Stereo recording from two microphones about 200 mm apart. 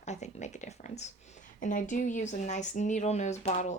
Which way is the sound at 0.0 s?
35° left (ahead or behind).